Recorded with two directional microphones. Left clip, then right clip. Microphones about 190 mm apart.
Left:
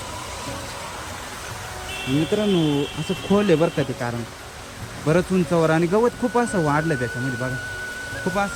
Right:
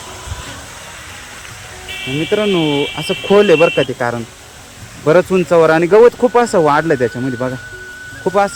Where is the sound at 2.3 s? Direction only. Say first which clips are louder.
Right 9 dB; 20° right (ahead or behind).